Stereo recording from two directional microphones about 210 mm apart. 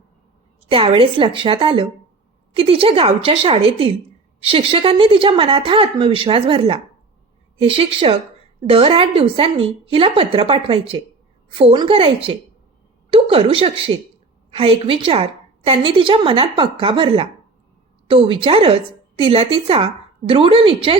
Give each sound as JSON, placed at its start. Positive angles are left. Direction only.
{"t": 0.7, "sound": "a woman's voice", "side_deg": -25}